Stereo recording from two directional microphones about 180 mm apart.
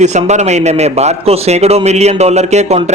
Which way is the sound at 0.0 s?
40° right (ahead or behind).